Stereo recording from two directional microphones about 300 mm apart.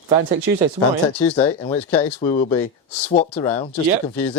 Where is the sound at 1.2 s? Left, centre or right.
Centre.